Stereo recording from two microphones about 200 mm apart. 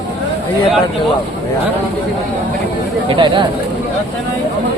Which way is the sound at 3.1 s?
25° right (ahead or behind).